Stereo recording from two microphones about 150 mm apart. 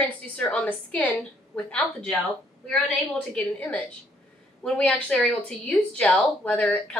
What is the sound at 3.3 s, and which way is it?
A woman's voice, 10° left (ahead or behind).